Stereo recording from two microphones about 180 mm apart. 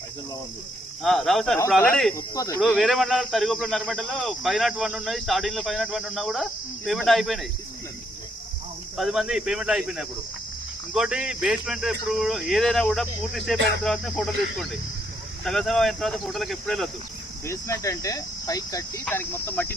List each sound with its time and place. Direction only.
1.0 s speech: centre (ahead or behind)
2.1 s speech: 20° left (ahead or behind)
2.6 s speech: centre (ahead or behind)
9.0 s speech: centre (ahead or behind)
17.4 s cricket: 15° left (ahead or behind)